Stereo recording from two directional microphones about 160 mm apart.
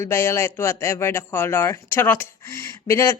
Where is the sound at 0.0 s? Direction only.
15° left (ahead or behind).